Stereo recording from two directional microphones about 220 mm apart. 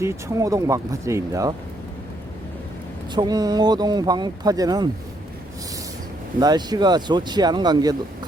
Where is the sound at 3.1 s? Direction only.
20° right (ahead or behind).